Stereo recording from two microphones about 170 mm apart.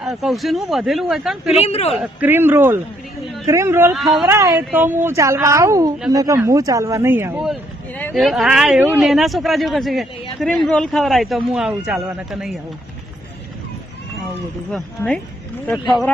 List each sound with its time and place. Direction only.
0.0 s speech: centre (ahead or behind)
1.6 s a man's voice: 35° left (ahead or behind)
1.9 s speech: 10° right (ahead or behind)
3.9 s speech: centre (ahead or behind)
4.3 s speech: 15° right (ahead or behind)
8.1 s speech: centre (ahead or behind)
14.7 s speech: 5° left (ahead or behind)